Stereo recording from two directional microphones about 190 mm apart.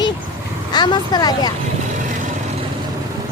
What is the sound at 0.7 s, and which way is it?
Speech, 25° left (ahead or behind).